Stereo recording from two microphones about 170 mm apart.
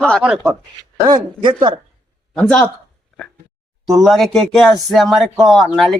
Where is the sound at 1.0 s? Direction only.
25° right (ahead or behind).